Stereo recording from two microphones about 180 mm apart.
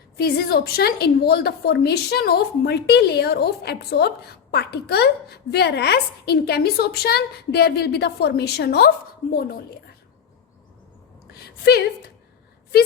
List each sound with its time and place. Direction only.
0.2 s a woman's voice: 60° left (ahead or behind)
11.6 s a woman's voice: 65° left (ahead or behind)